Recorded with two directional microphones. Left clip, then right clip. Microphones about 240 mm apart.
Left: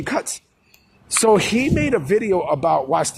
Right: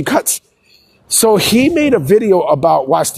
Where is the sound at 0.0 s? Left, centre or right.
Right.